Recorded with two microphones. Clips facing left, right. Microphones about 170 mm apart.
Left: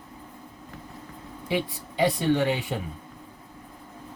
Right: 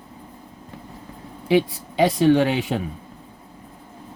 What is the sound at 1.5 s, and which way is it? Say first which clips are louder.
Speech: right 9 dB; 90° right.